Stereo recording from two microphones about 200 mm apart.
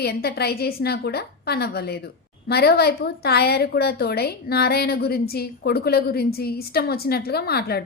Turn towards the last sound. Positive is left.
turn(degrees=50)  # may be behind; listen again after turning